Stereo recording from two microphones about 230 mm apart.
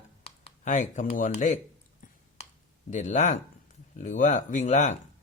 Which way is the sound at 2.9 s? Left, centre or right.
Left.